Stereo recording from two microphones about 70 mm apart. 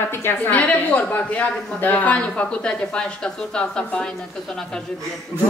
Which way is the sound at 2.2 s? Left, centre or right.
Centre.